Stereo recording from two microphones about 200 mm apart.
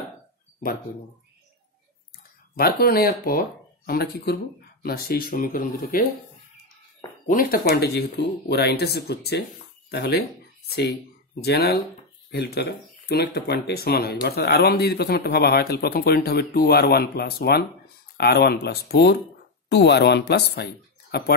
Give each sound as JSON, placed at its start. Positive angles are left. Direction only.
{"t": 2.5, "sound": "speech", "side_deg": 50}
{"t": 7.2, "sound": "speech", "side_deg": 45}